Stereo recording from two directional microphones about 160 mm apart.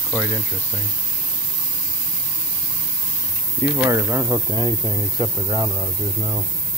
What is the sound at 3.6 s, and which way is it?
Speech, 20° right (ahead or behind).